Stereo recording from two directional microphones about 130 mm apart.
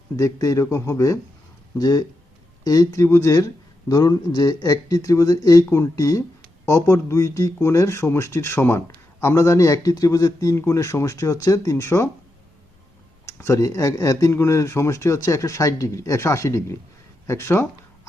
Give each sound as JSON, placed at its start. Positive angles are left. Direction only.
{"t": 0.2, "sound": "speech", "side_deg": 25}
{"t": 13.2, "sound": "speech", "side_deg": 25}